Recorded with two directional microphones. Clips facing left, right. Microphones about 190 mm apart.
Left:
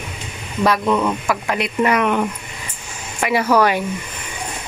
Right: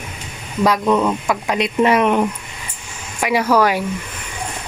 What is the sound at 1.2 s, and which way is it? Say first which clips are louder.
Speech: right 2 dB; 15° right (ahead or behind).